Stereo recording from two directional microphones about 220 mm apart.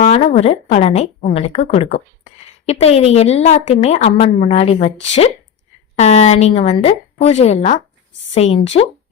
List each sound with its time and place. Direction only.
0.0 s a woman's voice: 30° left (ahead or behind)